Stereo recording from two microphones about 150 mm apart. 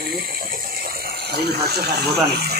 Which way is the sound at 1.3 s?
90° right.